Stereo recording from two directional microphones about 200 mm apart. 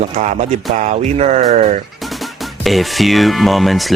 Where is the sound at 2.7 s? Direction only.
Centre (ahead or behind).